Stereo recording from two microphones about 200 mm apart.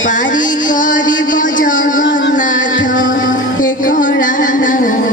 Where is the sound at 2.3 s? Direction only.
40° left (ahead or behind).